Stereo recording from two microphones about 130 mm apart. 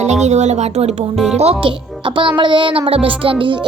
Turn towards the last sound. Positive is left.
turn(degrees=-40)  # may be behind; listen again after turning